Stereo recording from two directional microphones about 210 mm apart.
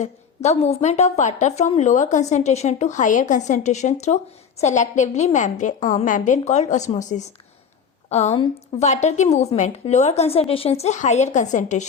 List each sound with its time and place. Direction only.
0.0 s a woman's voice: 30° left (ahead or behind)